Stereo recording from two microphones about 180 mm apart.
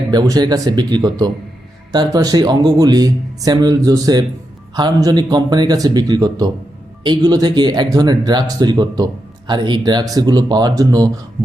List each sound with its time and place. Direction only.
0.1 s speech: 20° right (ahead or behind)